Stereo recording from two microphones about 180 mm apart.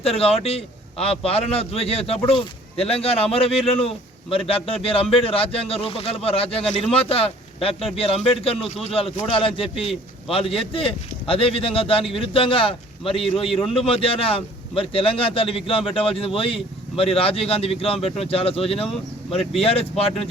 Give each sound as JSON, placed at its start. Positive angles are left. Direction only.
{"t": 0.0, "sound": "speech", "side_deg": 35}